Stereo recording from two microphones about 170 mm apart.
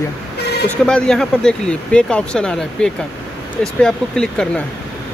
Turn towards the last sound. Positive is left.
turn(degrees=5)  # may be behind; listen again after turning